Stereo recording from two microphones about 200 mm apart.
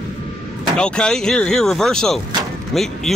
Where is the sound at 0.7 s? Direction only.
5° left (ahead or behind).